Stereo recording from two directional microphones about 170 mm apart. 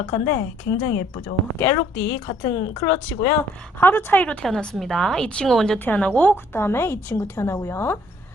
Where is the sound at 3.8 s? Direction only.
10° left (ahead or behind).